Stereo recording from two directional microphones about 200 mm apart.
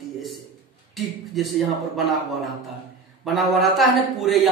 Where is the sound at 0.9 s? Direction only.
Centre (ahead or behind).